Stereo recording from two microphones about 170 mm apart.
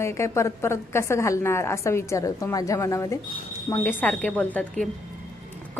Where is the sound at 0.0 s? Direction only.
15° left (ahead or behind).